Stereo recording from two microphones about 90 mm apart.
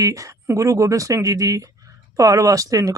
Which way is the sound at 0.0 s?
35° right (ahead or behind).